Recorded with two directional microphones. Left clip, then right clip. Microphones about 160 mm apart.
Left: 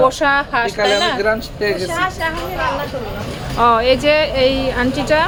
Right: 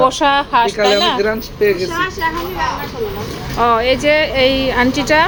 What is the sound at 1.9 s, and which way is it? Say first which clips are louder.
Speech: even; 50° left (ahead or behind).